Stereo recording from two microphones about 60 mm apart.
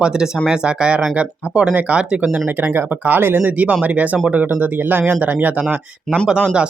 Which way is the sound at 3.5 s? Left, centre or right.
Right.